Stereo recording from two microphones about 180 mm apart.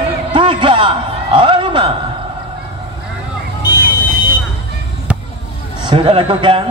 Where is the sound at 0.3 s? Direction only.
25° right (ahead or behind).